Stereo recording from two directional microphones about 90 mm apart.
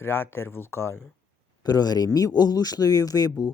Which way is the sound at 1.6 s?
50° left (ahead or behind).